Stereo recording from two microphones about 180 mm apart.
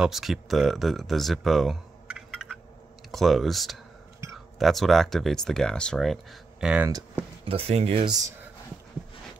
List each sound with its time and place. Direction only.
0.0 s speech: centre (ahead or behind)
7.4 s speech: 30° right (ahead or behind)